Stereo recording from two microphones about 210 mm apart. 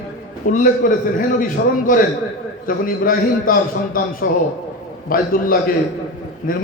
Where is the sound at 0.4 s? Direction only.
40° left (ahead or behind).